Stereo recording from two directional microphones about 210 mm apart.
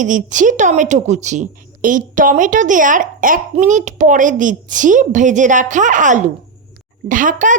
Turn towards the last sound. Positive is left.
turn(degrees=-40)  # may be behind; listen again after turning